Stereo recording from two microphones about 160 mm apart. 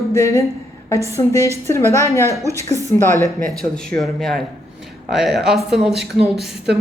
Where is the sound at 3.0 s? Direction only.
15° left (ahead or behind).